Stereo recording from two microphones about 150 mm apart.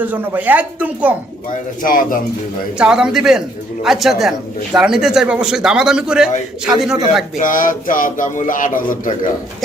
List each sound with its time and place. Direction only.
0.0 s speech: 10° right (ahead or behind)
1.8 s a man's voice: 65° left (ahead or behind)
2.7 s speech: 5° right (ahead or behind)
7.3 s speech: 60° left (ahead or behind)